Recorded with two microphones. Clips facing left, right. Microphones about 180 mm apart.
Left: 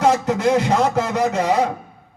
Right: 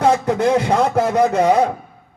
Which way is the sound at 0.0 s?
55° right (ahead or behind).